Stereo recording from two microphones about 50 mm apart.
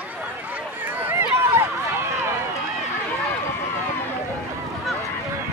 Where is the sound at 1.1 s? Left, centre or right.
Right.